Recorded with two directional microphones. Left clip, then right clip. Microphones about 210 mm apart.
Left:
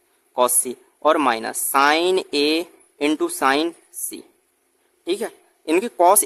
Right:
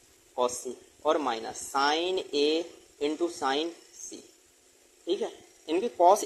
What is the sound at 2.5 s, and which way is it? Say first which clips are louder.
Speech: left 7 dB; 90° left.